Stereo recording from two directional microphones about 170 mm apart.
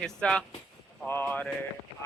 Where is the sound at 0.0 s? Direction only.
5° left (ahead or behind).